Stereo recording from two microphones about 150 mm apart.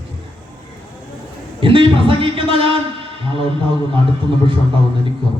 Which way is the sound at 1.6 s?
35° right (ahead or behind).